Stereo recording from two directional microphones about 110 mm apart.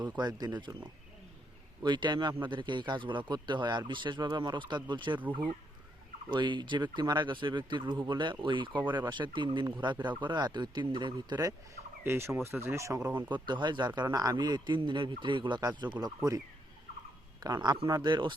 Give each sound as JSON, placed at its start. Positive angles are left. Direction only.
{"t": 0.2, "sound": "speech", "side_deg": -40}
{"t": 1.8, "sound": "speech", "side_deg": -45}
{"t": 6.3, "sound": "speech", "side_deg": -45}
{"t": 12.0, "sound": "speech", "side_deg": -25}
{"t": 13.4, "sound": "speech", "side_deg": -45}
{"t": 17.4, "sound": "speech", "side_deg": -40}